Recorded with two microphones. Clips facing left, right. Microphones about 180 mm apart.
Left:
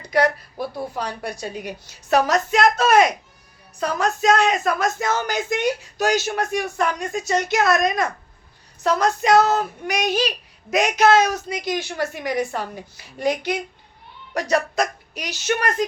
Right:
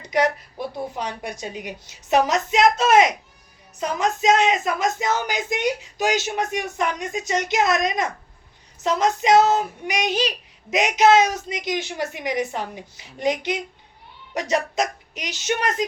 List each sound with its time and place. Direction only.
0.0 s speech: 20° right (ahead or behind)